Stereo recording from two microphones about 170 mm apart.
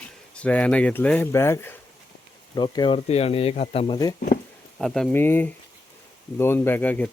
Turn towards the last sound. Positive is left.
turn(degrees=10)  # may be behind; listen again after turning